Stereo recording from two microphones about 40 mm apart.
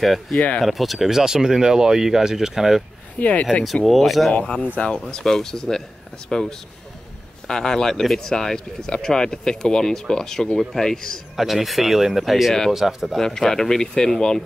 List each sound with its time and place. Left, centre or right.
0.0 s speech: centre
3.2 s speech: left
3.8 s speech: centre
4.3 s speech: left
4.9 s speech: centre
11.3 s speech: centre
13.2 s speech: centre